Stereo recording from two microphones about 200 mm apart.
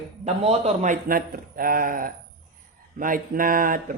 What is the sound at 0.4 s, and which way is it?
Speech, 35° right (ahead or behind).